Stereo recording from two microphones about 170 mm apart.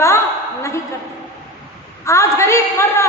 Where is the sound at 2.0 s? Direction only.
15° left (ahead or behind).